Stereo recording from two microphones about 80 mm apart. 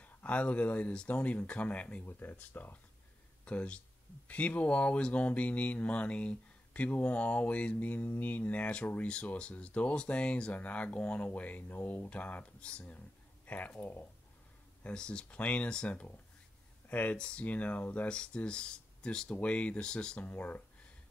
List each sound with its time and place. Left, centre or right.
0.0 s speech: centre